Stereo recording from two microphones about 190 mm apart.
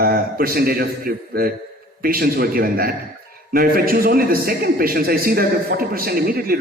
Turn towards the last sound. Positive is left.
turn(degrees=-50)  # may be behind; listen again after turning